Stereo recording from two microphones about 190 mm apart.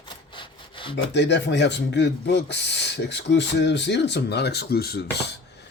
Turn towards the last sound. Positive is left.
turn(degrees=60)  # may be behind; listen again after turning